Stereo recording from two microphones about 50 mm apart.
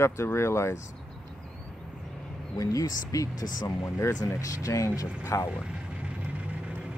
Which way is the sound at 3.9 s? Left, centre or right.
Left.